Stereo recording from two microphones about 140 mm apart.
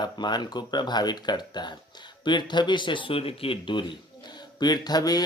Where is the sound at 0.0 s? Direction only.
30° left (ahead or behind).